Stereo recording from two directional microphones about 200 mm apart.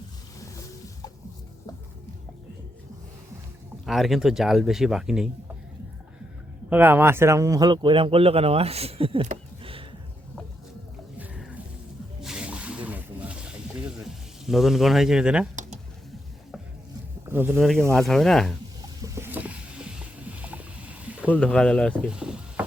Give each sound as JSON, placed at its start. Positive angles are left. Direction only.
{"t": 3.8, "sound": "speech", "side_deg": 0}
{"t": 6.7, "sound": "speech", "side_deg": -10}
{"t": 11.2, "sound": "music", "side_deg": -5}
{"t": 12.2, "sound": "a sound", "side_deg": -5}
{"t": 17.2, "sound": "a sound", "side_deg": -10}
{"t": 17.5, "sound": "speech", "side_deg": 0}
{"t": 19.0, "sound": "vehicle", "side_deg": -15}
{"t": 20.4, "sound": "rowboat", "side_deg": -5}
{"t": 21.2, "sound": "speech", "side_deg": 5}